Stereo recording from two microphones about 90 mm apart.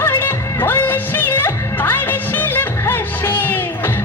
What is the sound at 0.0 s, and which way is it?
Music, 25° left (ahead or behind).